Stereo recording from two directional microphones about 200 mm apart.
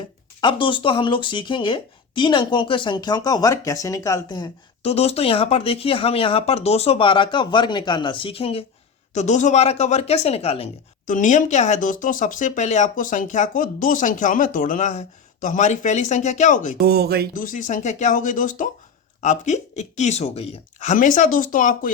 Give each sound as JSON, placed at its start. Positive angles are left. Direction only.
{"t": 0.4, "sound": "speech", "side_deg": 25}
{"t": 16.8, "sound": "speech", "side_deg": -50}
{"t": 17.3, "sound": "speech", "side_deg": 40}